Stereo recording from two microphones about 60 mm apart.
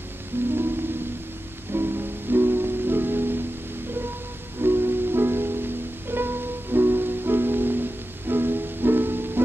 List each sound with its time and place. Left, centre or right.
0.3 s music: right
1.7 s music: right
4.6 s music: right